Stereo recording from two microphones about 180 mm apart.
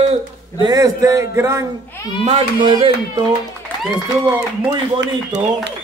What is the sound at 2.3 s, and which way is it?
Speech, 25° right (ahead or behind).